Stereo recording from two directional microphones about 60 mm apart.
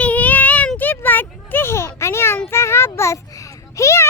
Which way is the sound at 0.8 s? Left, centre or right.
Left.